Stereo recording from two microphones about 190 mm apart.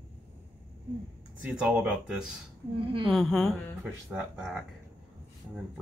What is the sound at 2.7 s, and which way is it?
Speech, 30° right (ahead or behind).